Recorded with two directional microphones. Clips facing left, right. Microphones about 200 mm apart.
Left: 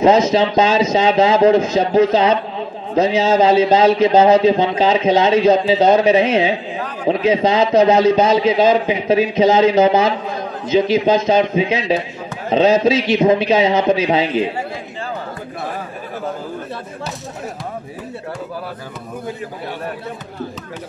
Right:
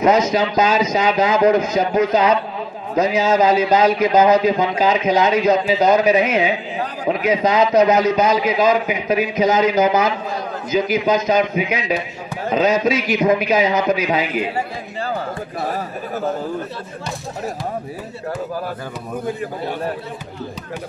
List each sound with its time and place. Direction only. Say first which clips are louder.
0.0 s a man's voice: left 3 dB; 25° left (ahead or behind)